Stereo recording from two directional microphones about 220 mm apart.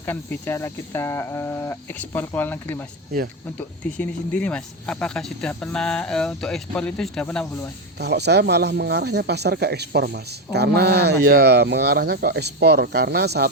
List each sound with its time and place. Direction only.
0.0 s speech: 10° left (ahead or behind)
7.9 s speech: 50° right (ahead or behind)